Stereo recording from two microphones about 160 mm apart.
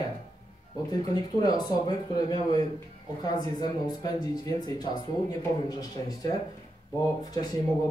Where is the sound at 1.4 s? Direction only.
25° left (ahead or behind).